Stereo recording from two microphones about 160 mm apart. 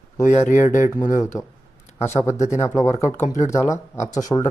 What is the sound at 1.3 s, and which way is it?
Speech, 20° left (ahead or behind).